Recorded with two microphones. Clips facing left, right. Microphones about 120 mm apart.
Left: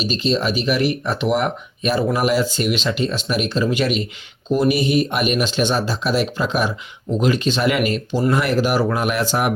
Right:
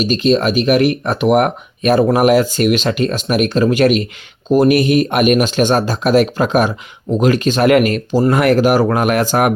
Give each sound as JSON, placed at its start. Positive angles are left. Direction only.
{"t": 0.0, "sound": "speech", "side_deg": -55}